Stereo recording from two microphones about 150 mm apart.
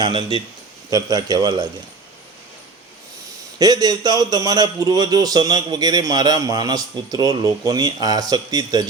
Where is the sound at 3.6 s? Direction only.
25° right (ahead or behind).